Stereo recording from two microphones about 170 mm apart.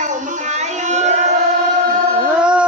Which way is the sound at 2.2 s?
5° right (ahead or behind).